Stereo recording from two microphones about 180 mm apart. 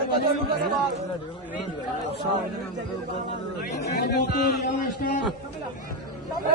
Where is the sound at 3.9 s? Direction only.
65° left (ahead or behind).